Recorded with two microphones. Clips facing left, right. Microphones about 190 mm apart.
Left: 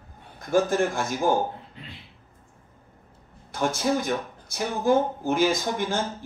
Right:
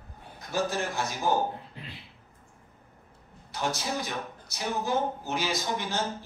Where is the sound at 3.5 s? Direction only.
50° left (ahead or behind).